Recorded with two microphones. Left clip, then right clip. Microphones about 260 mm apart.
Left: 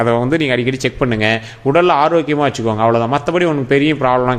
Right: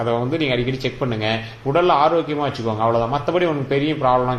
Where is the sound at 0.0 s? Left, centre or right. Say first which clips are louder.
Left 6 dB; left.